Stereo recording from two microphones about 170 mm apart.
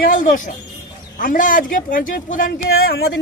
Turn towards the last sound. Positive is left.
turn(degrees=70)  # may be behind; listen again after turning